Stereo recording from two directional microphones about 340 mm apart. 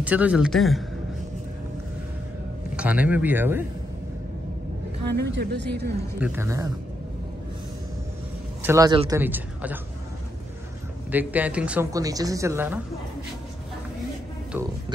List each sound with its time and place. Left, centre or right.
0.0 s a man's voice: centre
2.7 s a man's voice: centre
5.0 s a woman's voice: right
6.1 s a woman's voice: centre
8.6 s a woman's voice: centre
11.1 s a woman's voice: centre